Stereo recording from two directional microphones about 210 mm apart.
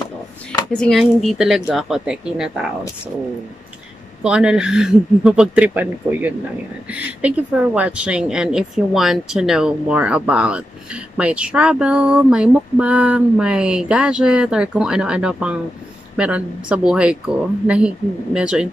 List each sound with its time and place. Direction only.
0.7 s speech: centre (ahead or behind)
4.2 s speech: 5° right (ahead or behind)